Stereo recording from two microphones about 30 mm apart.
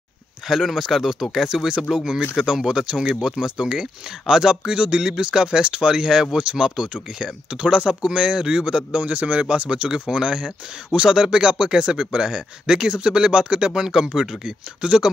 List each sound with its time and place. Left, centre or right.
0.5 s speech: centre; by 7.3 s right
7.5 s speech: right
8.9 s speech: right
9.8 s speech: right
13.7 s speech: right
14.4 s speech: right